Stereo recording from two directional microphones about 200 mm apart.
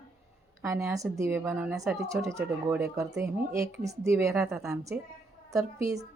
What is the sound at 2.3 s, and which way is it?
Speech, 15° right (ahead or behind).